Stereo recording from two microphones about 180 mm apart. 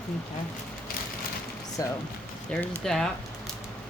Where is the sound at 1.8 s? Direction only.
20° left (ahead or behind).